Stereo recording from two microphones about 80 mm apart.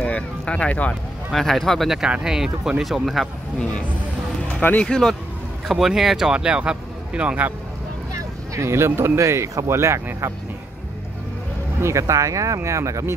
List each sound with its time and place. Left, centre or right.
0.0 s a sound: centre
1.3 s speech: centre
4.6 s speech: centre
5.7 s speech: centre
8.1 s speech: right
11.8 s speech: right